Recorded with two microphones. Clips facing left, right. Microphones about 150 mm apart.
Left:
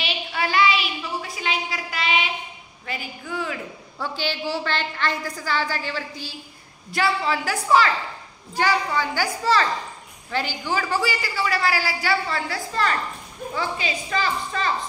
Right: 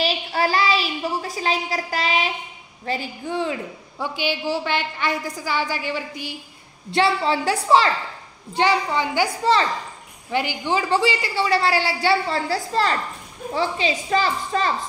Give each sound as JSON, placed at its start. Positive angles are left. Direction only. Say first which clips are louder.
{"t": 0.0, "sound": "a sound", "louder": "right 5 dB", "side_deg": -35}
{"t": 2.8, "sound": "a woman's voice", "louder": "right 6 dB", "side_deg": -30}
{"t": 4.0, "sound": "a woman's voice", "louder": "right 2 dB", "side_deg": -15}
{"t": 6.9, "sound": "a woman's voice", "louder": "right 3 dB", "side_deg": -30}